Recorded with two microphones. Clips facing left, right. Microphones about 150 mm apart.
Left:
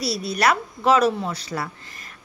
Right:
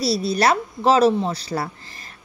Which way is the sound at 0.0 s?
30° right (ahead or behind).